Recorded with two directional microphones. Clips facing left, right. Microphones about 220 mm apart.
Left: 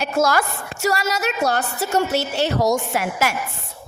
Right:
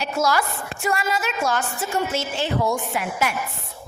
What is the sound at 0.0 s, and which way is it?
Speech, 50° left (ahead or behind).